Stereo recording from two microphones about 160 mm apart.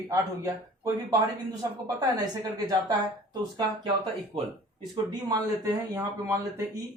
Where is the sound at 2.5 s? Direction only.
25° right (ahead or behind).